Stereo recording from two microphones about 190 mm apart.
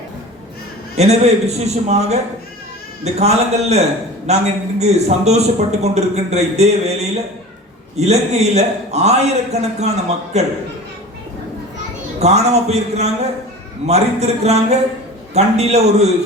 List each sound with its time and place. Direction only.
0.9 s a man's voice: 35° right (ahead or behind)
12.2 s a man's voice: 35° right (ahead or behind)